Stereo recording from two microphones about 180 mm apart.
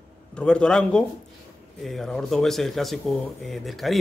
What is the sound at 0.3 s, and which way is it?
Speech, 5° left (ahead or behind).